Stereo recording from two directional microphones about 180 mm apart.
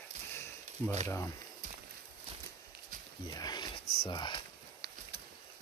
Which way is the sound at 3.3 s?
20° left (ahead or behind).